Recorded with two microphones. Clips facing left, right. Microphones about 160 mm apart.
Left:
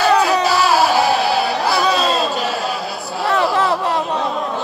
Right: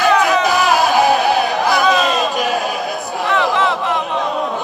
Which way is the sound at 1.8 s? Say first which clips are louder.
Right 3 dB; 35° left (ahead or behind).